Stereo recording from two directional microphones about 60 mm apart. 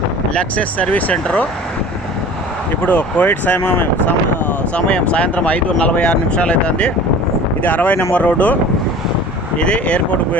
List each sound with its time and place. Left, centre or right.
0.3 s speech: left
2.8 s speech: left
4.7 s speech: centre
7.6 s speech: left
9.6 s speech: centre